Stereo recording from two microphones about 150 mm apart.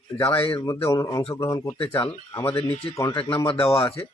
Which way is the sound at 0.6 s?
20° left (ahead or behind).